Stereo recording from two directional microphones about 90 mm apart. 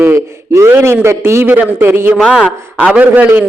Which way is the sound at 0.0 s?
30° right (ahead or behind).